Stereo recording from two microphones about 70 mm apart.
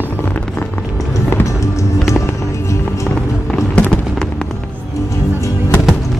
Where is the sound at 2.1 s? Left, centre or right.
Left.